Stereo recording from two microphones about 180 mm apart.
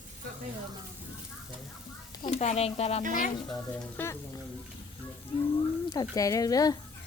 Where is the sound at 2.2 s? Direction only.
40° left (ahead or behind).